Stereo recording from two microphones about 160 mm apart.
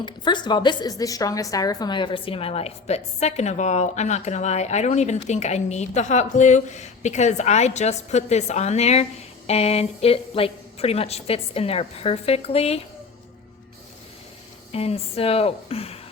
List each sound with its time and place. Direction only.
0.0 s a woman's voice: 30° left (ahead or behind)
14.7 s a woman's voice: 40° left (ahead or behind)